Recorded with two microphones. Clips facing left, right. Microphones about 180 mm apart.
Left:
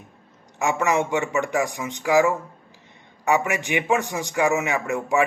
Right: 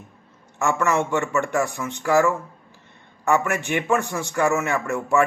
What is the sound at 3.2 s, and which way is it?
A man's voice, 15° left (ahead or behind).